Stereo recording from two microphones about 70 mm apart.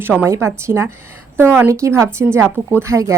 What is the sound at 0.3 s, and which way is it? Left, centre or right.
Speech, right.